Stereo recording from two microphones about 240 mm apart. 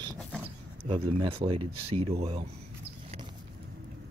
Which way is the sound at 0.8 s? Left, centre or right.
Right.